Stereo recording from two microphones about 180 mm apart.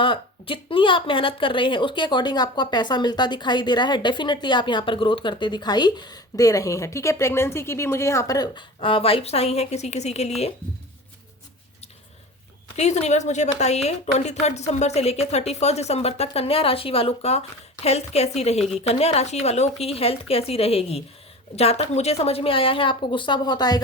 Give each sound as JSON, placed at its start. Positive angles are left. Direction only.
{"t": 0.0, "sound": "a woman's voice", "side_deg": 30}
{"t": 12.7, "sound": "a woman's voice", "side_deg": 40}